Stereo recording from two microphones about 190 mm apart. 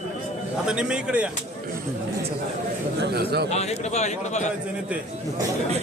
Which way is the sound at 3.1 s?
55° right (ahead or behind).